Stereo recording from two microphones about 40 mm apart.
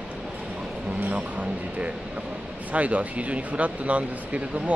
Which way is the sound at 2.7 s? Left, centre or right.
Right.